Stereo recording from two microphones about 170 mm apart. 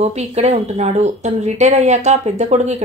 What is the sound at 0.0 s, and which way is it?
A woman's voice, 40° right (ahead or behind).